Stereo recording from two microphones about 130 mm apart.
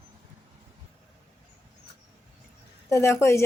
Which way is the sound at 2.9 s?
20° left (ahead or behind).